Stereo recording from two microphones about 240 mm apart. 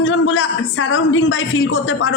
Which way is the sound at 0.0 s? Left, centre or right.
Left.